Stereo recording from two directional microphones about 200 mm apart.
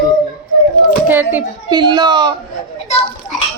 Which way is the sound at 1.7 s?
20° right (ahead or behind).